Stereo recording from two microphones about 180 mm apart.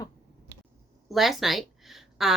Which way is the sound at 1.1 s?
Centre (ahead or behind).